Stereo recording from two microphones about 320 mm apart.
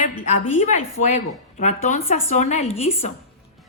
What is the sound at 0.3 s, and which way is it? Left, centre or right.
A woman's voice, left.